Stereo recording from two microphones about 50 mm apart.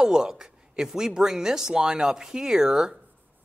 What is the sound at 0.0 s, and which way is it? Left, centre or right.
Speech, centre.